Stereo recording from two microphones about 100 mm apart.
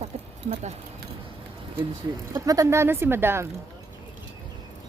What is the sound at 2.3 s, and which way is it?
Speech, 35° right (ahead or behind).